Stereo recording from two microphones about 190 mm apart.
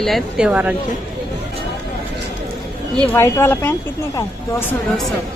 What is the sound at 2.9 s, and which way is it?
Speech, 10° left (ahead or behind).